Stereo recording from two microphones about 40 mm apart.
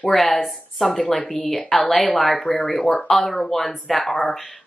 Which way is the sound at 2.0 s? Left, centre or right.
Centre.